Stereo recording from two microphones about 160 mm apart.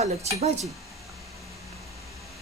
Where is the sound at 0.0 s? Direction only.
40° right (ahead or behind).